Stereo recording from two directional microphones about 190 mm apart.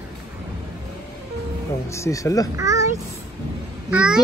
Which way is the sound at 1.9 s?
15° left (ahead or behind).